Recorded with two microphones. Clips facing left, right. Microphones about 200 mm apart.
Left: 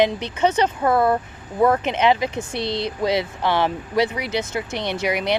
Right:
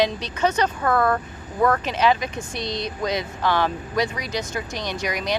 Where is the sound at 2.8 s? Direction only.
25° left (ahead or behind).